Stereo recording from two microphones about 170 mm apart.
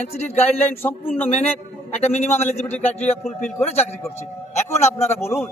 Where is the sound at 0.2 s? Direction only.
40° left (ahead or behind).